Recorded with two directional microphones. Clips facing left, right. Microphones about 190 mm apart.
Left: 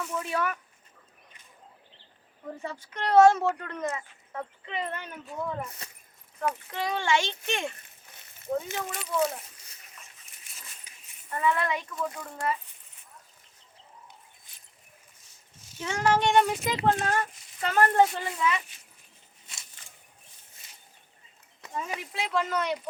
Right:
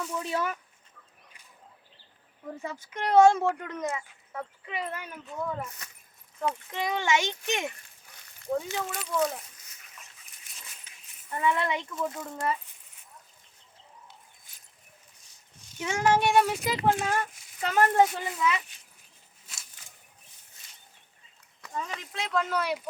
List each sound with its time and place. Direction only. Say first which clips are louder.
0.2 s speech: left 1 dB; 25° right (ahead or behind)
2.9 s a child's voice: left 1 dB; 10° right (ahead or behind)
6.7 s a child's voice: even; 20° right (ahead or behind)
8.1 s a sound: even; 25° left (ahead or behind)
8.9 s speech: left 1 dB; centre (ahead or behind)
10.9 s a sound: left 1 dB; 10° left (ahead or behind)
11.3 s speech: even; 15° right (ahead or behind)
15.8 s speech: right 1 dB; 10° right (ahead or behind)
19.5 s a sound: even; 5° right (ahead or behind)
21.6 s speech: left 1 dB; 15° left (ahead or behind)
22.5 s a child's voice: even; 5° right (ahead or behind)